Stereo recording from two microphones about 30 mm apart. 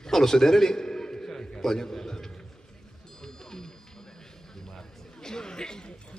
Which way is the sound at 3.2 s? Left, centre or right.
Left.